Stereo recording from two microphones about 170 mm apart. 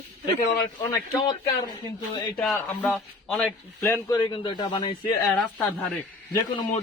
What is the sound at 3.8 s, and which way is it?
Speech, 20° left (ahead or behind).